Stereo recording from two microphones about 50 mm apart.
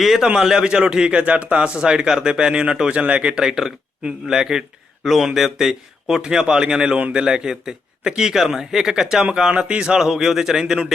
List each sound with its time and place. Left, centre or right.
0.2 s speech: centre
9.5 s speech: right